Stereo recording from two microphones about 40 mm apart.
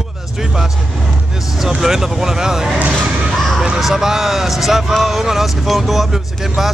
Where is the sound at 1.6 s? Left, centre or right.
Centre.